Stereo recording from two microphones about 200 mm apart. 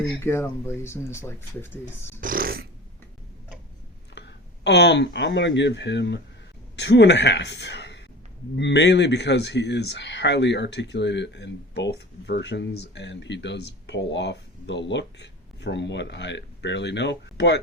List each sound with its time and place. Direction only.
0.2 s speech: 10° left (ahead or behind)
2.2 s a sound: 45° right (ahead or behind)
4.6 s a woman's voice: 60° left (ahead or behind)